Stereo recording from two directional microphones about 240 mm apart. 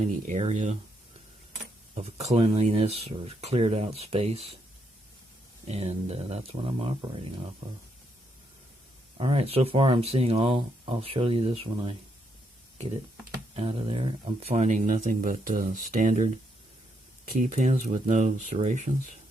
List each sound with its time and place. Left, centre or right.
0.0 s speech: right
2.0 s speech: right
5.6 s speech: right
9.1 s speech: right
13.6 s speech: right